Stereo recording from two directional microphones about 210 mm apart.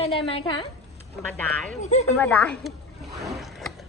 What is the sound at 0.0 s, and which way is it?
Speech, 25° left (ahead or behind).